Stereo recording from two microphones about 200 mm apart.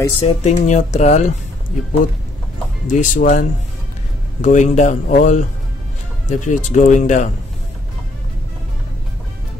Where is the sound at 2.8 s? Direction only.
40° left (ahead or behind).